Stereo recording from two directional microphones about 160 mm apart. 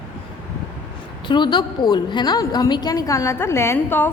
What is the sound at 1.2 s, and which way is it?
A woman's voice, 30° left (ahead or behind).